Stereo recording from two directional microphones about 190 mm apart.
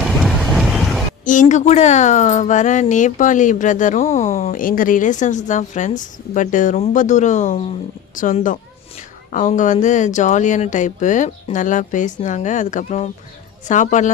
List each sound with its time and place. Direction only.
0.2 s vehicle: centre (ahead or behind)
1.2 s speech: 40° left (ahead or behind)